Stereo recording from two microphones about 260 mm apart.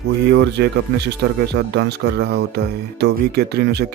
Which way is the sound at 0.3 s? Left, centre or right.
Right.